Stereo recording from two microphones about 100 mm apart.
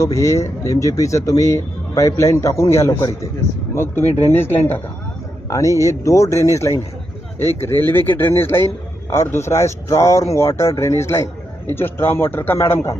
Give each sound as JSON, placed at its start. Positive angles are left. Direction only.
{"t": 0.0, "sound": "a man's voice", "side_deg": 30}
{"t": 5.5, "sound": "a man's voice", "side_deg": 30}